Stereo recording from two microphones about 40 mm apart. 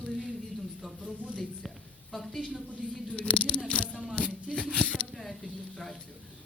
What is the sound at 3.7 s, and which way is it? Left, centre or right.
Rattle, left.